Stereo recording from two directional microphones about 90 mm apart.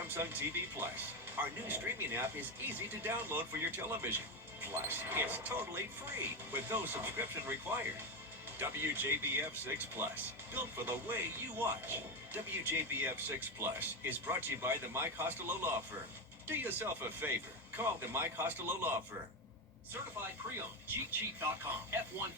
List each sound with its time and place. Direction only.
0.1 s speech: 25° right (ahead or behind)
8.5 s speech: 25° right (ahead or behind)
20.6 s speech: 25° right (ahead or behind)